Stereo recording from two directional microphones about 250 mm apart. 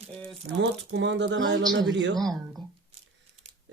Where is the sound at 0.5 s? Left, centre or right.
Right.